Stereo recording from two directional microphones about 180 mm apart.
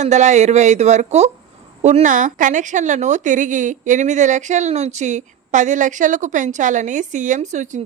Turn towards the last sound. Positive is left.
turn(degrees=-45)  # may be behind; listen again after turning